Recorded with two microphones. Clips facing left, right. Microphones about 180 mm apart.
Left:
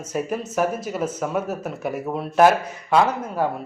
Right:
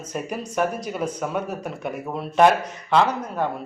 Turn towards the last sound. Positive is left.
turn(degrees=5)  # may be behind; listen again after turning